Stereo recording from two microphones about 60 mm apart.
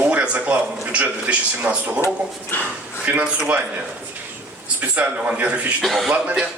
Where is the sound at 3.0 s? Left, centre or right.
Right.